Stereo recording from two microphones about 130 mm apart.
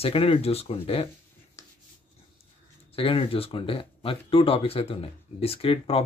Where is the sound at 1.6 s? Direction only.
25° left (ahead or behind).